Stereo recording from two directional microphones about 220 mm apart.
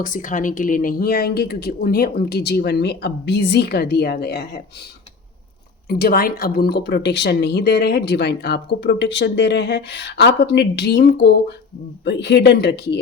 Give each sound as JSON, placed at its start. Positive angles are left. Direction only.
{"t": 0.0, "sound": "speech", "side_deg": 40}
{"t": 5.9, "sound": "speech", "side_deg": 45}